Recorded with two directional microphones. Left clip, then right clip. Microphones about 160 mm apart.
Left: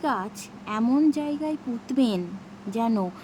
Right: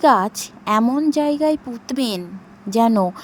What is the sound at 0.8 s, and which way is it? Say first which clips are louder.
Speech: even; 35° right (ahead or behind).